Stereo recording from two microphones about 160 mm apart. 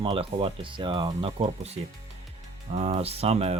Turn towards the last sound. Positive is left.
turn(degrees=-40)  # may be behind; listen again after turning